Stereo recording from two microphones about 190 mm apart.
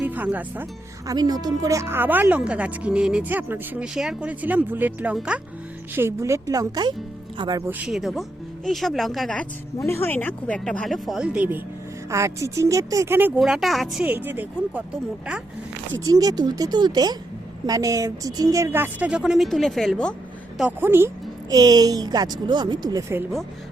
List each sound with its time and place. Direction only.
0.0 s speech: 10° right (ahead or behind)
1.1 s a woman's voice: 20° right (ahead or behind)
7.7 s speech: 5° right (ahead or behind)
16.0 s a woman's voice: 20° right (ahead or behind); by 20.1 s 5° left (ahead or behind)
20.6 s a woman's voice: 10° right (ahead or behind)